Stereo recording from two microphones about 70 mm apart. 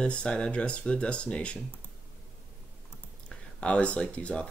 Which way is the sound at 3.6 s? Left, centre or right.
Centre.